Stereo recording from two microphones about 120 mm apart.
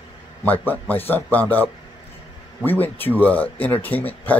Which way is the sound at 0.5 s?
15° left (ahead or behind).